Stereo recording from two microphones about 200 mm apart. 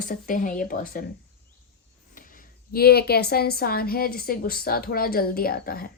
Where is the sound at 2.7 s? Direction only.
50° left (ahead or behind).